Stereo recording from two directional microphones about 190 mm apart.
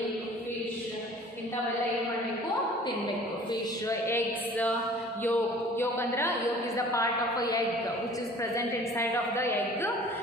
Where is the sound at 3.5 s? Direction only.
20° left (ahead or behind).